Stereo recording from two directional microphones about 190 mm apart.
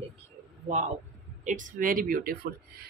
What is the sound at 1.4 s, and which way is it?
Speech, 45° right (ahead or behind).